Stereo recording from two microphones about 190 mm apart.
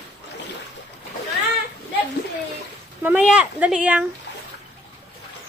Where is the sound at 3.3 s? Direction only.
5° right (ahead or behind).